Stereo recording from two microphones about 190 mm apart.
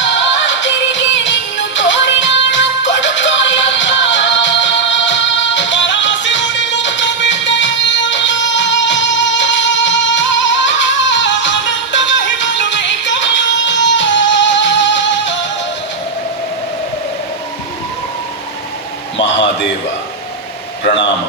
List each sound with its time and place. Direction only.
0.0 s music: 75° left (ahead or behind)